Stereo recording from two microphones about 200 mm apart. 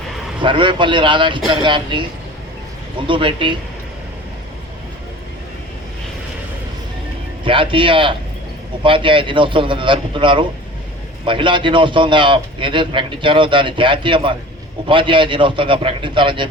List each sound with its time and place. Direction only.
0.4 s a man's voice: 25° right (ahead or behind)
3.1 s a man's voice: 25° right (ahead or behind)
7.4 s a man's voice: 25° right (ahead or behind)